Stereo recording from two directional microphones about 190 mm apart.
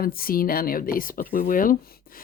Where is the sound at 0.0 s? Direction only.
50° left (ahead or behind).